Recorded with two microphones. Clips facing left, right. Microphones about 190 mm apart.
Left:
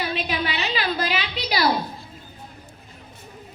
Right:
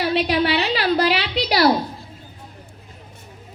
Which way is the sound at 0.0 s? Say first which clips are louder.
Right 7 dB; 70° right (ahead or behind).